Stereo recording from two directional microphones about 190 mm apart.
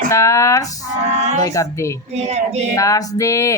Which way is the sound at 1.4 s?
15° left (ahead or behind).